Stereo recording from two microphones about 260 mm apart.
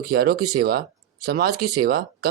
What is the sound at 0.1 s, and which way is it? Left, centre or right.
Speech, right.